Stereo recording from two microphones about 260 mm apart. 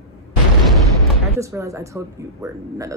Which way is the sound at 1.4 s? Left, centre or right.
Centre.